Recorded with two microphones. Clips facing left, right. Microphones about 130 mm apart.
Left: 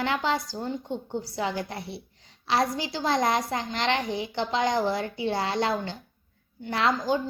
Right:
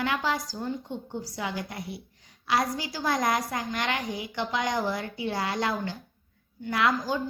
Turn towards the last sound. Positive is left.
turn(degrees=30)  # may be behind; listen again after turning